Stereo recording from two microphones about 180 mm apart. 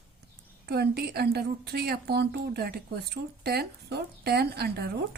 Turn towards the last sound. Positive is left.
turn(degrees=-60)  # may be behind; listen again after turning